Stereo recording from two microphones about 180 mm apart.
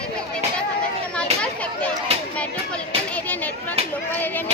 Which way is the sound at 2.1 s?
35° right (ahead or behind).